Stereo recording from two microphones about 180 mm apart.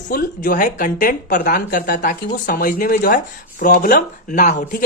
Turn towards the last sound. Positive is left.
turn(degrees=50)  # may be behind; listen again after turning